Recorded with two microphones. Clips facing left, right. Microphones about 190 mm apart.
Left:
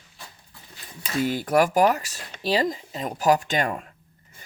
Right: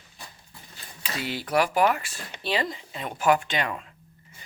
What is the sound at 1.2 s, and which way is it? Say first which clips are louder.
Speech: left 4 dB; 45° left (ahead or behind).